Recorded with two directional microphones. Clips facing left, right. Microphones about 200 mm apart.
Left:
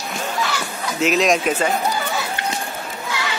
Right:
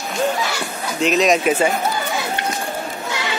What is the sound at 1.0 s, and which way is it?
Speech, centre (ahead or behind).